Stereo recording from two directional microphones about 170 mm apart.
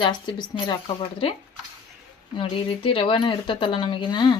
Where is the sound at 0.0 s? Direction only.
25° left (ahead or behind).